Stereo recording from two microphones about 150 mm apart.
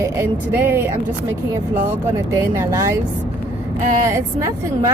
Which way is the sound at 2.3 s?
15° right (ahead or behind).